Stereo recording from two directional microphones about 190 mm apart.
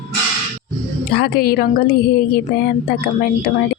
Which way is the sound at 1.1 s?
55° left (ahead or behind).